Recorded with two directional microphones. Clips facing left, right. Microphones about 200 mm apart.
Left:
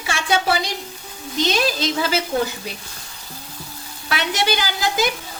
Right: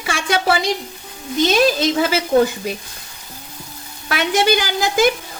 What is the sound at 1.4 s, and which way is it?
Speech, 50° right (ahead or behind).